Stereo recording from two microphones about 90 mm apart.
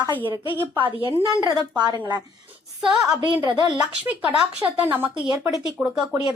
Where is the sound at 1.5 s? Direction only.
50° right (ahead or behind).